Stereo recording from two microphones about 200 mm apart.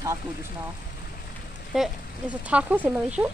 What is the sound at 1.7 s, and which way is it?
Speech, 5° right (ahead or behind).